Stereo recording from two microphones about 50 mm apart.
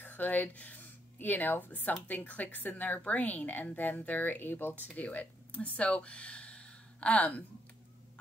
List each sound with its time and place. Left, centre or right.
0.0 s speech: left
4.9 s speech: left